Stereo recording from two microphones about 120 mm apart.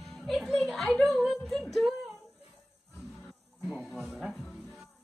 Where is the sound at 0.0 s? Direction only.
Centre (ahead or behind).